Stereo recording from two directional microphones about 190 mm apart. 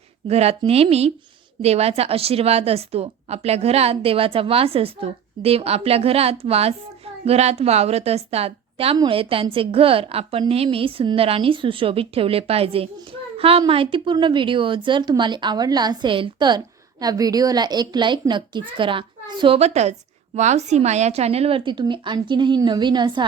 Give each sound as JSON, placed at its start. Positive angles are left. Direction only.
{"t": 0.3, "sound": "a woman's voice", "side_deg": -35}